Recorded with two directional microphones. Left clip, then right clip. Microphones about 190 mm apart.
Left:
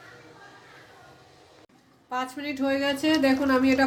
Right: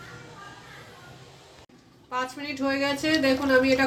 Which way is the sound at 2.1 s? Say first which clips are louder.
Even; 70° left (ahead or behind).